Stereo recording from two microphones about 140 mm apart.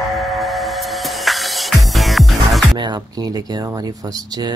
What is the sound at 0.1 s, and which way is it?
Music, centre (ahead or behind).